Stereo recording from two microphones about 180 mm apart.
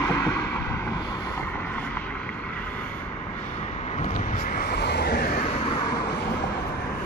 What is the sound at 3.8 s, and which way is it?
Vehicle, 40° left (ahead or behind).